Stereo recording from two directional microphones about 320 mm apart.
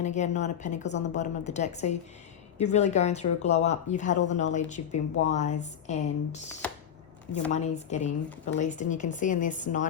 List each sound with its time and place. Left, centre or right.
0.0 s speech: left
7.5 s speech: left